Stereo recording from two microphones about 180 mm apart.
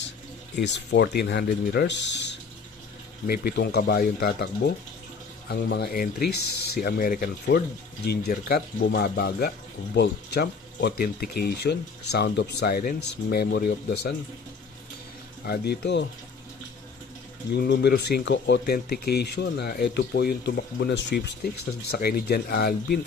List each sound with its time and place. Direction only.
0.6 s speech: 70° left (ahead or behind)
3.3 s speech: 60° left (ahead or behind)
15.4 s speech: 60° left (ahead or behind)
17.5 s speech: 65° left (ahead or behind)